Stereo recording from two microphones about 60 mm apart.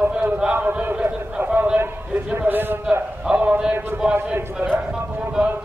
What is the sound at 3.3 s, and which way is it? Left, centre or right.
A man's voice, right.